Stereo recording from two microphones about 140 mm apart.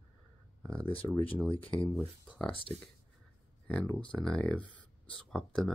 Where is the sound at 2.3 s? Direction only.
Centre (ahead or behind).